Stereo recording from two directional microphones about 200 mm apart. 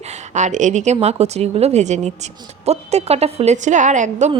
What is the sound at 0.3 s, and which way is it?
A woman's voice, 35° right (ahead or behind).